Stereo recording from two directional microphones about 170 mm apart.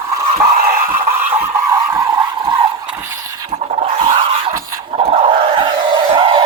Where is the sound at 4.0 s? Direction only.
30° right (ahead or behind).